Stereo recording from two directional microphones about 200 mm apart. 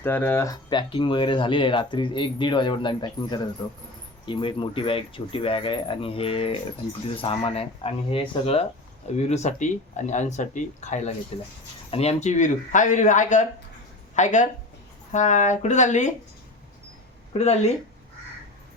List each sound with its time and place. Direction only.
0.0 s speech: 10° left (ahead or behind); by 16.1 s 35° left (ahead or behind)
17.3 s speech: 30° left (ahead or behind)